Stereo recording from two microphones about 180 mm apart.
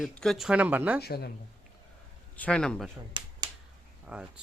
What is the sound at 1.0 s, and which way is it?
Speech, 60° left (ahead or behind).